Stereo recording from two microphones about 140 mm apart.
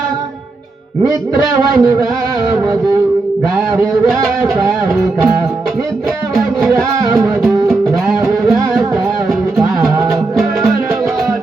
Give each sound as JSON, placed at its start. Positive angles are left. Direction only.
{"t": 1.5, "sound": "a man's voice", "side_deg": -25}
{"t": 7.1, "sound": "music", "side_deg": -15}